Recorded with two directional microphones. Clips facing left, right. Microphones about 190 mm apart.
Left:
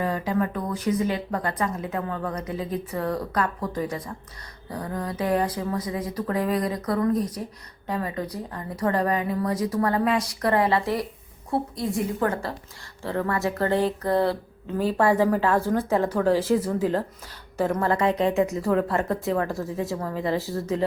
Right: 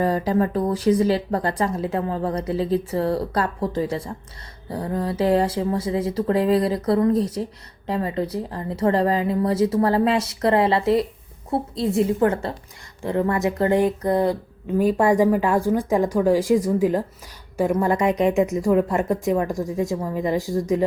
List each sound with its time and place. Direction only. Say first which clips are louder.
0.0 s a woman's voice: right 5 dB; 35° right (ahead or behind); by 20.8 s 15° right (ahead or behind)